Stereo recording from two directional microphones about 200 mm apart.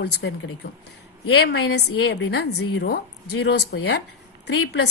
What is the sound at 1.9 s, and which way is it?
Speech, 80° left.